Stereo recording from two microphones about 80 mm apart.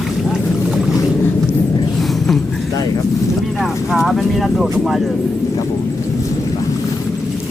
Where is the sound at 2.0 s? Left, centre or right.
Centre.